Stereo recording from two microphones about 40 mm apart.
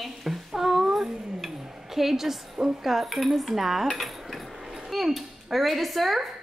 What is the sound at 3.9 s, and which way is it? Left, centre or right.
Dishes, centre.